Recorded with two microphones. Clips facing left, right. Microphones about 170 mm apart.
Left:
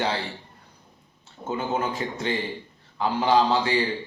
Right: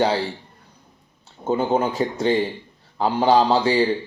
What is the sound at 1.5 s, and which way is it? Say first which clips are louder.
Speech: right 7 dB; 35° right (ahead or behind).